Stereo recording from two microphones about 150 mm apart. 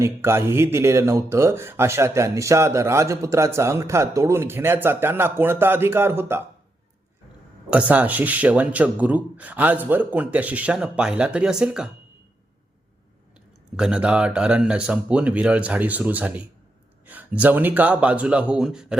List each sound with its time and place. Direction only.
0.0 s speech: 15° right (ahead or behind)
7.7 s speech: 10° right (ahead or behind)
13.7 s speech: 5° right (ahead or behind)